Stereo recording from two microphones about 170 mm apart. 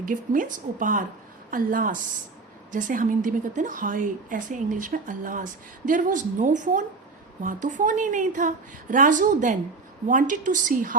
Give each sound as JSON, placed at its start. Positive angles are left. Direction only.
{"t": 0.0, "sound": "a woman's voice", "side_deg": -50}